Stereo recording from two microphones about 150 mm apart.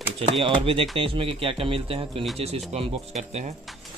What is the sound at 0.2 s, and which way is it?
Speech, 35° right (ahead or behind).